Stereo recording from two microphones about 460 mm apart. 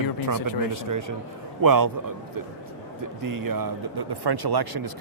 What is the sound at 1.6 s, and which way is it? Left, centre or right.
Speech, right.